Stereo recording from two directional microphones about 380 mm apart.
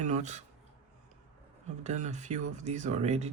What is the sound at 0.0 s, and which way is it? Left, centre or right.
Speech, centre.